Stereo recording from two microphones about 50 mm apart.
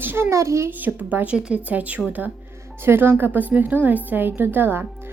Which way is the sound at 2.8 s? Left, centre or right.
Right.